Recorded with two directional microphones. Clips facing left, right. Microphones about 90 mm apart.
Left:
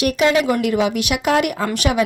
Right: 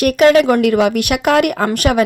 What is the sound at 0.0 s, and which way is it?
Speech, 55° right (ahead or behind).